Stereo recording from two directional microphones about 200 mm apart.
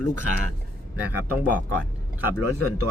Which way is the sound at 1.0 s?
10° right (ahead or behind).